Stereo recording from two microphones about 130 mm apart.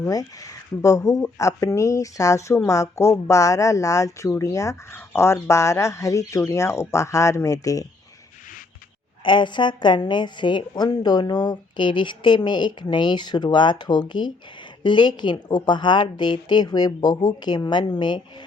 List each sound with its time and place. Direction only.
0.0 s speech: 25° left (ahead or behind)
9.2 s speech: 40° left (ahead or behind)